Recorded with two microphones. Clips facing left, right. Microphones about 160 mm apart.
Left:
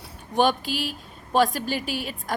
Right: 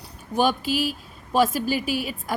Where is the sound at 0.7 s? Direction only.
45° right (ahead or behind).